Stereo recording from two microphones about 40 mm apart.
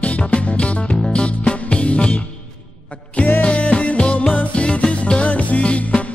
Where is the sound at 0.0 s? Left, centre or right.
Left.